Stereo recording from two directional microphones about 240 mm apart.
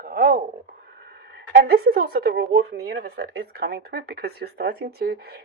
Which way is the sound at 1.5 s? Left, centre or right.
Right.